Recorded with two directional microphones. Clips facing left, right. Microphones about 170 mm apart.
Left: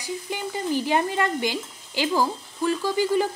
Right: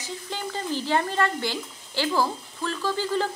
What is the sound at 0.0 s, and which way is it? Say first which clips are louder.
Stir: left 3 dB; 15° left (ahead or behind).